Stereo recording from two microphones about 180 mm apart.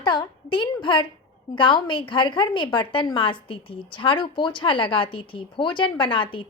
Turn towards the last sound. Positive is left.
turn(degrees=30)  # may be behind; listen again after turning